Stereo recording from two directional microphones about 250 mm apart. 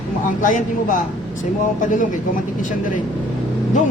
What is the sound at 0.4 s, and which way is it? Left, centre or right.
Speech, left.